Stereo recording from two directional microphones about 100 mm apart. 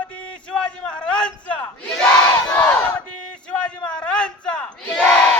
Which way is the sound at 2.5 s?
15° left (ahead or behind).